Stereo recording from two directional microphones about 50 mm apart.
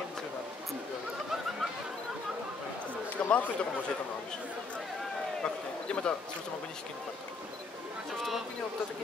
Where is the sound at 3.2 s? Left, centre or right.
Left.